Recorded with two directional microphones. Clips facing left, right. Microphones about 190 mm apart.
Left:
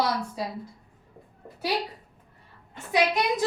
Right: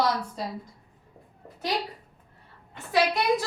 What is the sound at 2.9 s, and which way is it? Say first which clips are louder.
Speech: right 1 dB; 20° left (ahead or behind).